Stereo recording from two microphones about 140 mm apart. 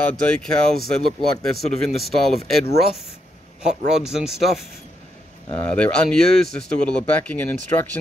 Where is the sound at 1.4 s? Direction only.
Centre (ahead or behind).